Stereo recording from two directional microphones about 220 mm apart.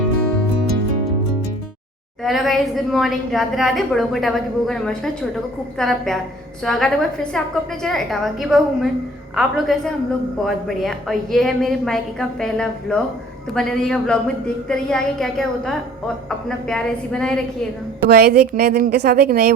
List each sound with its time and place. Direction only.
2.2 s a woman's voice: centre (ahead or behind)
18.1 s speech: 45° right (ahead or behind)